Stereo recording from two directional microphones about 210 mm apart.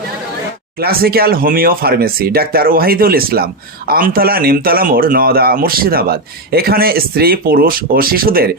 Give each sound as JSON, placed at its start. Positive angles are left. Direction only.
{"t": 0.8, "sound": "speech", "side_deg": -45}